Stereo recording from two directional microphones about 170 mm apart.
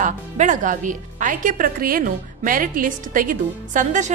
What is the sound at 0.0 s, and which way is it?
A woman's voice, 50° right (ahead or behind).